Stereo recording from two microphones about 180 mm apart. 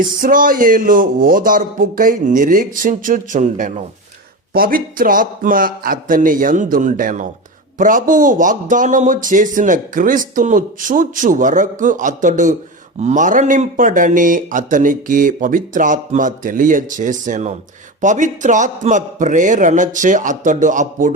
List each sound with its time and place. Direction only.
0.0 s a man's voice: 50° right (ahead or behind)
4.5 s a man's voice: 55° right (ahead or behind)